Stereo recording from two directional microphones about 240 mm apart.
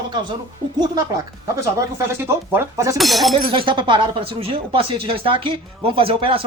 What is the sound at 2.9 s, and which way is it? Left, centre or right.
Speech, centre.